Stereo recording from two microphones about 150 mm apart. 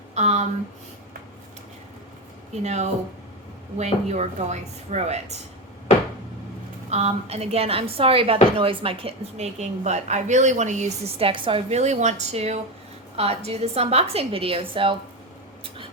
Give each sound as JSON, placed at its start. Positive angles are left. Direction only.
{"t": 0.1, "sound": "a sound", "side_deg": -50}
{"t": 3.8, "sound": "speech", "side_deg": -50}
{"t": 6.9, "sound": "a woman's voice", "side_deg": -45}
{"t": 11.7, "sound": "a woman's voice", "side_deg": -50}